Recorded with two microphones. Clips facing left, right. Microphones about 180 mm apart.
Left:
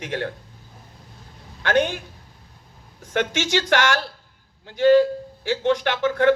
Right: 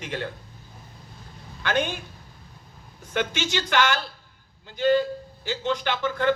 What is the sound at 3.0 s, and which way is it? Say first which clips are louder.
Speech: left 3 dB; 75° left (ahead or behind).